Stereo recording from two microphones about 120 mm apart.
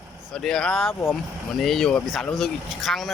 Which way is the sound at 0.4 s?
5° left (ahead or behind).